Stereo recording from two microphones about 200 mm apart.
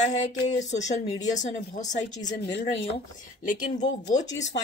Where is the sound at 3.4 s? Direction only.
40° left (ahead or behind).